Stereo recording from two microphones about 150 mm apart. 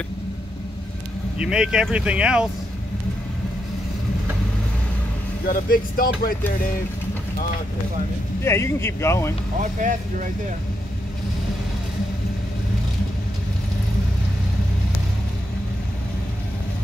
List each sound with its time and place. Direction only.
1.4 s speech: 5° right (ahead or behind)
5.5 s speech: 75° left (ahead or behind)
8.5 s speech: 20° left (ahead or behind)
9.6 s speech: 55° right (ahead or behind)